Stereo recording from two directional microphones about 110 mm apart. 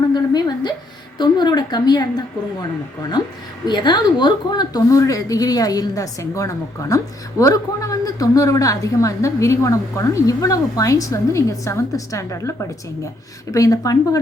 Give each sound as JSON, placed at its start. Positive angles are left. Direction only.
{"t": 0.1, "sound": "a sound", "side_deg": 40}
{"t": 1.2, "sound": "a woman's voice", "side_deg": 40}
{"t": 3.7, "sound": "a woman's voice", "side_deg": 40}